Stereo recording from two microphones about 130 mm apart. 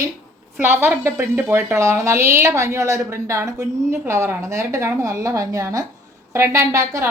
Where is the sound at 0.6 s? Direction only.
20° right (ahead or behind).